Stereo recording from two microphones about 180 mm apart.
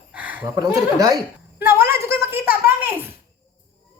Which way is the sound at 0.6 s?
20° right (ahead or behind).